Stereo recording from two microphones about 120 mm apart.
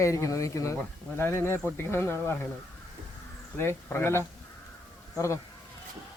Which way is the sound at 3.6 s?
20° left (ahead or behind).